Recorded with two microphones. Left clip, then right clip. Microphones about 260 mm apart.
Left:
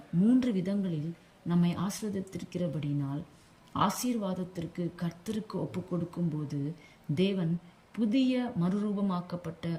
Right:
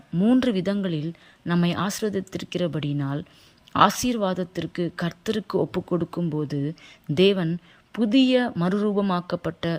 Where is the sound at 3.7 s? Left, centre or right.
Centre.